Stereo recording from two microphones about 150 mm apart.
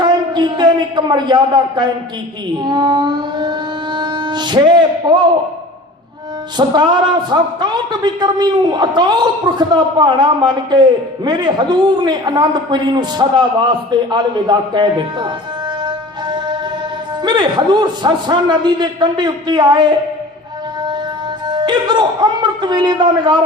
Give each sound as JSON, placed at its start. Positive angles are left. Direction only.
{"t": 0.0, "sound": "a man's voice", "side_deg": -30}
{"t": 2.6, "sound": "a sound", "side_deg": -30}
{"t": 6.6, "sound": "a man's voice", "side_deg": -30}
{"t": 17.2, "sound": "a man's voice", "side_deg": -30}
{"t": 21.4, "sound": "a man's voice", "side_deg": -30}